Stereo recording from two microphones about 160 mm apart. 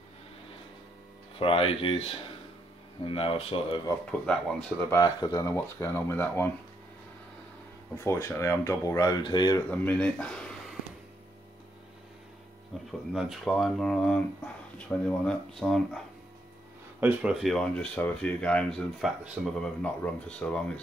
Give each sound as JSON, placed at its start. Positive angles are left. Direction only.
{"t": 1.4, "sound": "speech", "side_deg": 35}
{"t": 4.3, "sound": "speech", "side_deg": 5}
{"t": 4.9, "sound": "speech", "side_deg": 25}
{"t": 8.0, "sound": "speech", "side_deg": 15}
{"t": 9.7, "sound": "speech", "side_deg": 10}
{"t": 13.1, "sound": "speech", "side_deg": 0}
{"t": 17.0, "sound": "speech", "side_deg": -5}
{"t": 19.6, "sound": "speech", "side_deg": 10}